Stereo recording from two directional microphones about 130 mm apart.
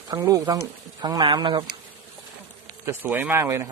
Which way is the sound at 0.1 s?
25° right (ahead or behind).